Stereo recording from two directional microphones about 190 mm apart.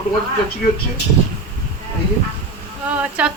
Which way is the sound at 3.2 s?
5° right (ahead or behind).